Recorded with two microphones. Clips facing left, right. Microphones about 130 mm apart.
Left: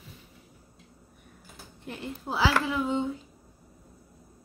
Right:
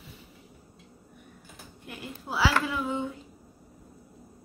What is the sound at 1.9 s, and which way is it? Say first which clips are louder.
Speech: left 3 dB; 25° left (ahead or behind).